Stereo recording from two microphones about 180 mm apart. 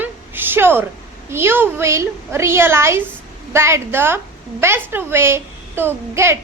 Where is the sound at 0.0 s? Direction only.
10° right (ahead or behind).